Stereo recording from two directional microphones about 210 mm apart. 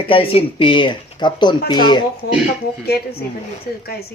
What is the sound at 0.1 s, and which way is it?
Speech, 25° left (ahead or behind).